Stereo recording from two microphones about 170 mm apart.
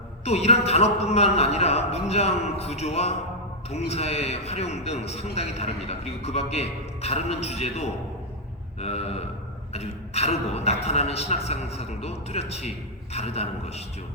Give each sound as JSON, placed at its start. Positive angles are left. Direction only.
{"t": 0.3, "sound": "a man's voice", "side_deg": 40}